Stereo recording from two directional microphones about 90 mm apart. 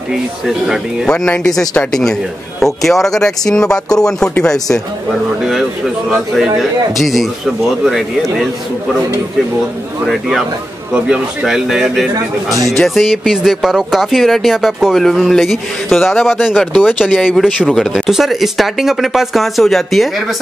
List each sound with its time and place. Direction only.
1.0 s speech: 10° left (ahead or behind)
5.4 s speech: 5° right (ahead or behind)
10.9 s speech: 5° right (ahead or behind)